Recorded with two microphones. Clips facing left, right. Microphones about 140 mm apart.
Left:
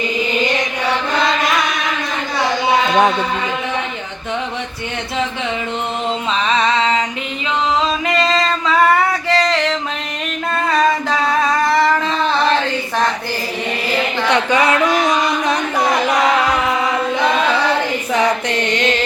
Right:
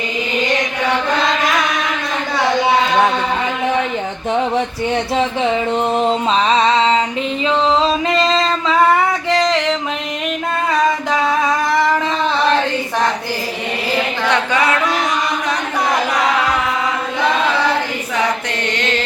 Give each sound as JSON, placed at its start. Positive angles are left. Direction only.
{"t": 6.1, "sound": "mantra", "side_deg": -35}
{"t": 7.8, "sound": "music", "side_deg": -25}
{"t": 10.7, "sound": "singing", "side_deg": -15}